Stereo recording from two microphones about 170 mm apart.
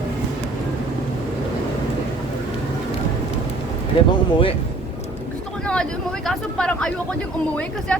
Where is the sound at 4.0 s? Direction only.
30° left (ahead or behind).